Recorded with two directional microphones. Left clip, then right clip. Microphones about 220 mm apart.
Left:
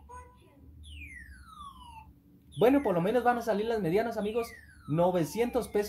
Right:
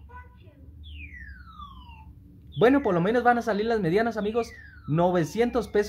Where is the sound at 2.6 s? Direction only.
20° right (ahead or behind).